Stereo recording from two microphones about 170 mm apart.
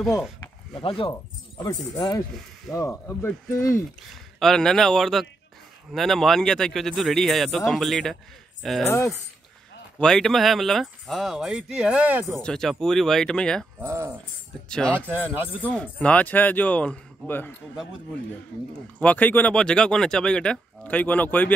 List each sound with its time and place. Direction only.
0.7 s speech: 30° left (ahead or behind)
4.4 s speech: 5° left (ahead or behind)
8.8 s speech: 15° left (ahead or behind)
9.9 s speech: 5° left (ahead or behind)
12.4 s speech: 5° left (ahead or behind)
13.7 s a sound: 15° right (ahead or behind)
14.7 s speech: 5° left (ahead or behind)
15.0 s speech: 10° right (ahead or behind)
15.7 s speech: 5° left (ahead or behind)
18.9 s speech: 10° left (ahead or behind)